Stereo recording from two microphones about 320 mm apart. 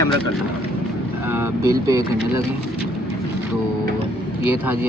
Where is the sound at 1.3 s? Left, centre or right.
Centre.